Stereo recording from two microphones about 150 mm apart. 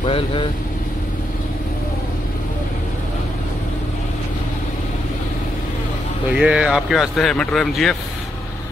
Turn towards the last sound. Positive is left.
turn(degrees=0)  # may be behind; listen again after turning